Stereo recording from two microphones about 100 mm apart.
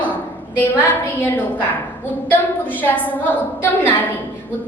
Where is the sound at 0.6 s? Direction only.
20° left (ahead or behind).